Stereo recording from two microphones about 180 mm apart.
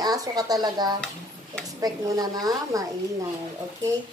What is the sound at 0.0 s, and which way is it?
Speech, 20° right (ahead or behind).